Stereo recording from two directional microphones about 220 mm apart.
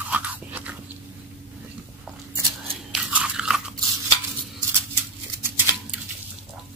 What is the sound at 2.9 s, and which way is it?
Biting, 5° right (ahead or behind).